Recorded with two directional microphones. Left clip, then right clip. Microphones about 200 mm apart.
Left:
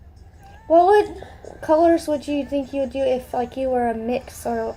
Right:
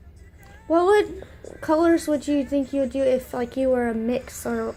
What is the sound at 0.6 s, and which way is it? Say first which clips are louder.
A woman's voice: left 4 dB; 45° right (ahead or behind).